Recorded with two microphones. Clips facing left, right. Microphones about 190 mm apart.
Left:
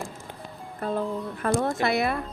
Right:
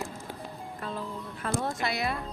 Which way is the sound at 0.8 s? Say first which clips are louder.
Left 10 dB; 50° left (ahead or behind).